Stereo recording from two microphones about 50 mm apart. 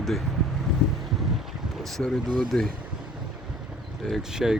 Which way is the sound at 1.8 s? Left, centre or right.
Centre.